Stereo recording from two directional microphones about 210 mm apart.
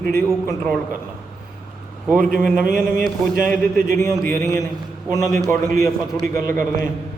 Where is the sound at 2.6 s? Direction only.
40° right (ahead or behind).